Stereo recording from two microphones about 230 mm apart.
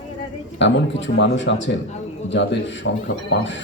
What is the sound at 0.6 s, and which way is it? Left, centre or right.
Speech, left.